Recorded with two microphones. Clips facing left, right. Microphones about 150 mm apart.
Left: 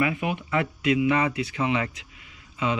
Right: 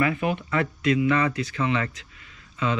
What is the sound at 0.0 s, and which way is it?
Speech, 15° left (ahead or behind).